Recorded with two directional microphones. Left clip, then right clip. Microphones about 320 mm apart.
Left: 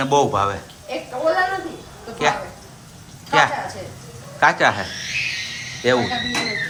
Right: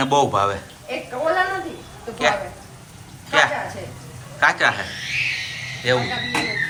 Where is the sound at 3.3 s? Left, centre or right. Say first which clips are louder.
Left 1 dB; centre.